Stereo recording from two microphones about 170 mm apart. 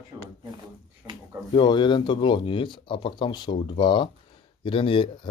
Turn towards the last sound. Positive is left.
turn(degrees=30)  # may be behind; listen again after turning